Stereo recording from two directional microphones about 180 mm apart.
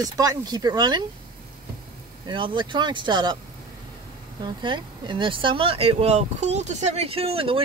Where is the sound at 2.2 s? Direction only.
25° right (ahead or behind).